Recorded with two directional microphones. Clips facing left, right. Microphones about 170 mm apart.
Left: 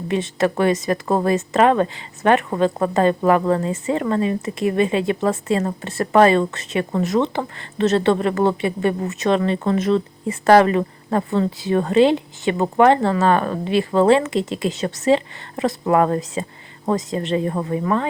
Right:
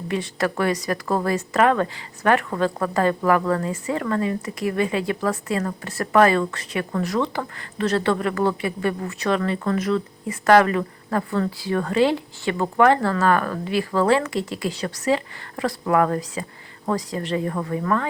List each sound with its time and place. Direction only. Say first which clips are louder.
0.1 s a woman's voice: left 4 dB; 25° left (ahead or behind)